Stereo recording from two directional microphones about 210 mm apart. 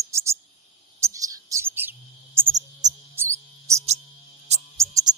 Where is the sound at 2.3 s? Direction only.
10° right (ahead or behind).